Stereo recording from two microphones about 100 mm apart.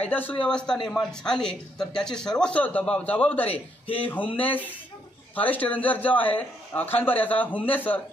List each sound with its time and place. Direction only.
0.0 s a man's voice: 20° left (ahead or behind)